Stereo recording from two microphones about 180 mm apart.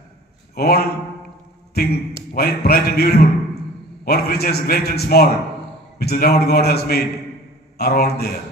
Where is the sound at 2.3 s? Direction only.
55° left (ahead or behind).